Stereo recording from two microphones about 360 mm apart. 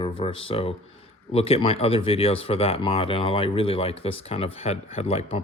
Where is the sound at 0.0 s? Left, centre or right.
Centre.